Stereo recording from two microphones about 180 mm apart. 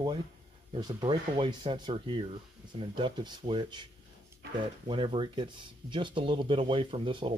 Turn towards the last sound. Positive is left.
turn(degrees=-30)  # may be behind; listen again after turning